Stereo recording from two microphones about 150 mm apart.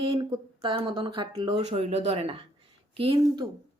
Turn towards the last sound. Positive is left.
turn(degrees=-35)  # may be behind; listen again after turning